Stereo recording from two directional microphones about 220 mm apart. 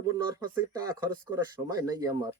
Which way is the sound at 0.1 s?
15° right (ahead or behind).